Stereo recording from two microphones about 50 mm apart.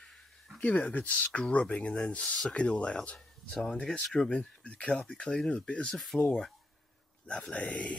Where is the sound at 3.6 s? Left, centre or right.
Centre.